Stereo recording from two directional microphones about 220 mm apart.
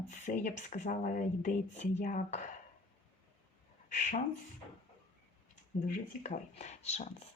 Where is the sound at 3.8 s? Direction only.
35° left (ahead or behind).